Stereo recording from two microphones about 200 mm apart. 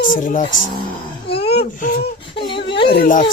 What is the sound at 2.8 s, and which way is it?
Speech, 45° left (ahead or behind).